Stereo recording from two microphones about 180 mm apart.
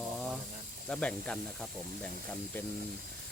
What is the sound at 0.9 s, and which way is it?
Speech, 5° left (ahead or behind).